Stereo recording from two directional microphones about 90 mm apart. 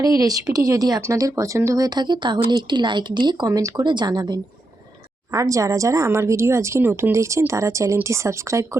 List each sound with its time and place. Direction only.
0.0 s speech: 40° right (ahead or behind); by 3.4 s 60° right (ahead or behind)
3.4 s speech: 40° right (ahead or behind)
3.8 s speech: 55° right (ahead or behind)
5.3 s speech: 40° right (ahead or behind)